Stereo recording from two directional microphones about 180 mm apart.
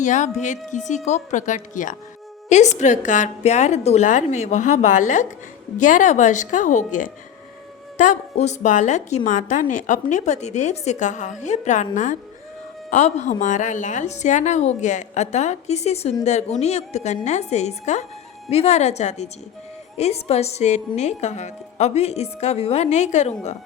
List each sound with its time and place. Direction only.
0.0 s a woman's voice: 40° left (ahead or behind)